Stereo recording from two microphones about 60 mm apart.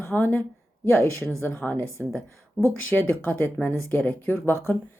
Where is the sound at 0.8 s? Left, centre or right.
Left.